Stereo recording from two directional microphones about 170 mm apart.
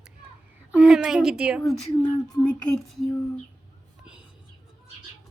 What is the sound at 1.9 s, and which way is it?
Speech, 30° left (ahead or behind).